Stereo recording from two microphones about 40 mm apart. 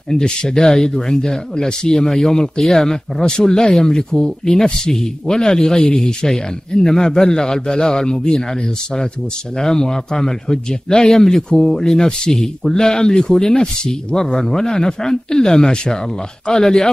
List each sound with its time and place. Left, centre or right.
0.1 s speech: centre
9.6 s speech: centre